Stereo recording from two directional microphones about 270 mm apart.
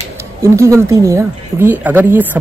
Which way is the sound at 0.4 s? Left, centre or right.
Centre.